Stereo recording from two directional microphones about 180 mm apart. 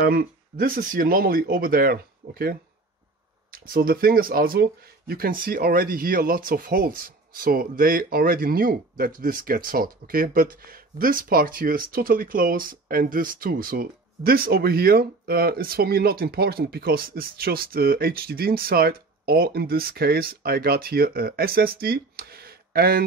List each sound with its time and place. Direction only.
0.0 s speech: 55° right (ahead or behind)
3.5 s speech: 55° right (ahead or behind)